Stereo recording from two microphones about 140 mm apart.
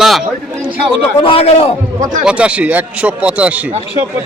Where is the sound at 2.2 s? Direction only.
5° right (ahead or behind).